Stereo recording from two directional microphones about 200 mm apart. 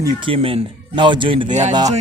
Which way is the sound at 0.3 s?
30° right (ahead or behind).